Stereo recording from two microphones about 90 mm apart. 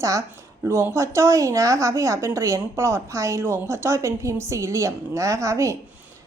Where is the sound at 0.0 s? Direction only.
35° right (ahead or behind).